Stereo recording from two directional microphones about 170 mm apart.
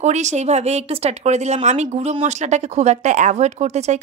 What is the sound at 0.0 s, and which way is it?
Speech, 45° right (ahead or behind).